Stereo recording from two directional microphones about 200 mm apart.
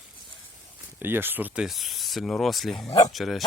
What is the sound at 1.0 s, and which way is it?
Speech, 10° right (ahead or behind).